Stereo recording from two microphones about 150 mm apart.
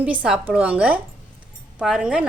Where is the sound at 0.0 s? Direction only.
10° right (ahead or behind).